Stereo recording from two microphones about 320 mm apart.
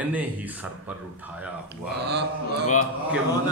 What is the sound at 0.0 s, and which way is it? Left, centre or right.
Speech, centre.